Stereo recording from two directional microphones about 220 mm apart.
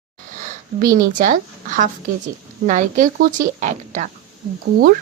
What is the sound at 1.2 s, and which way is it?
A woman's voice, 35° right (ahead or behind).